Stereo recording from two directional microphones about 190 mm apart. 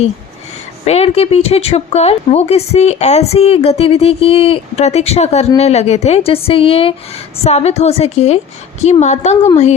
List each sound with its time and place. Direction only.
0.9 s speech: 30° left (ahead or behind)